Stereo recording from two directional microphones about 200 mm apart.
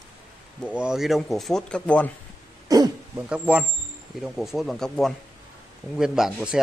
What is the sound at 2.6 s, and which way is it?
Throat clearing, 20° right (ahead or behind).